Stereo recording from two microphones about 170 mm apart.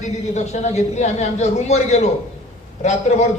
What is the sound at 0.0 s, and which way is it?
A man's voice, 45° left (ahead or behind).